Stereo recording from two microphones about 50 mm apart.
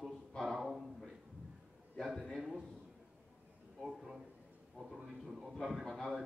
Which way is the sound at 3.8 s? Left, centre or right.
Centre.